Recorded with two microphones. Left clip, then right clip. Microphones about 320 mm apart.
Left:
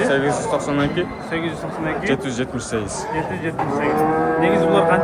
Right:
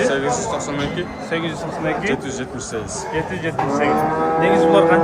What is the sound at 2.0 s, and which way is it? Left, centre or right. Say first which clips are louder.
Speech: left 1 dB; left.